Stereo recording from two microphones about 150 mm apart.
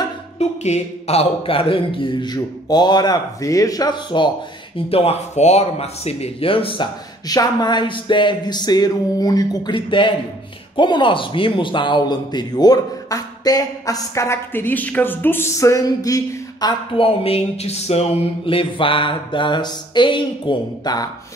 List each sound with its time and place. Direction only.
0.4 s speech: 45° left (ahead or behind); by 16.7 s 25° left (ahead or behind)
16.9 s speech: 40° left (ahead or behind)